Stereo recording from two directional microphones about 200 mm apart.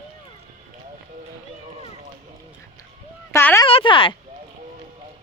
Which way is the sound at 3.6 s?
25° left (ahead or behind).